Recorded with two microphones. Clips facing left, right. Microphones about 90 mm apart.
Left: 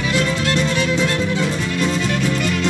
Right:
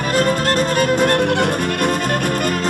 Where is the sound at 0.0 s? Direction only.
45° right (ahead or behind).